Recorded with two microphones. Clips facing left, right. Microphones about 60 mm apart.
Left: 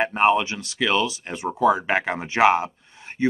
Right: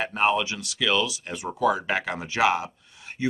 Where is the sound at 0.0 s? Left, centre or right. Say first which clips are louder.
Left 4 dB; left.